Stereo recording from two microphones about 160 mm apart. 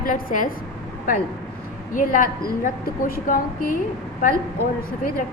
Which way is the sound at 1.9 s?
60° left (ahead or behind).